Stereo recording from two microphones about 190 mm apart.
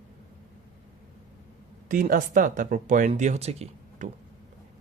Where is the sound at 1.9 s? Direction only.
45° right (ahead or behind).